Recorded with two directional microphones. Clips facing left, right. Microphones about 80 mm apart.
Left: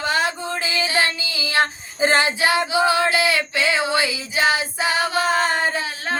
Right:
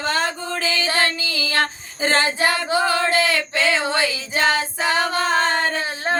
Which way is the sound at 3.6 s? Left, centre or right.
Centre.